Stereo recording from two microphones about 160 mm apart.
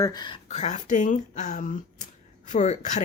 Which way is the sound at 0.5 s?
45° left (ahead or behind).